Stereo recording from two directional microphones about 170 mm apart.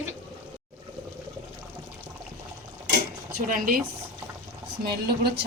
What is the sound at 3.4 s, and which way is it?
Speech, 50° right (ahead or behind).